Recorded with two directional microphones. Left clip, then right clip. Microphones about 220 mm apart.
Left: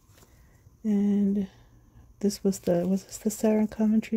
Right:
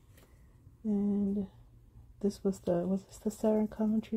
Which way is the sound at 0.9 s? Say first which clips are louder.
Left 6 dB; 25° left (ahead or behind).